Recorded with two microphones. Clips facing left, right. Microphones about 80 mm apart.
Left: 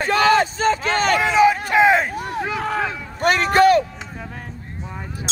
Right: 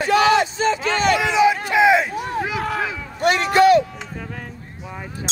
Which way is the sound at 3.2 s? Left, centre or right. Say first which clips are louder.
Even; left.